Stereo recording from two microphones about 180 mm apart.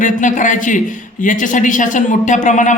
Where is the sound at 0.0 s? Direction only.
45° left (ahead or behind).